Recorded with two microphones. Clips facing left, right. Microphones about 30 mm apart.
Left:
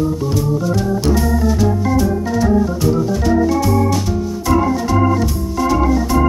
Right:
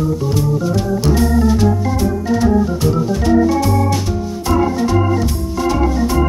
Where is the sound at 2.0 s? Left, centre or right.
Centre.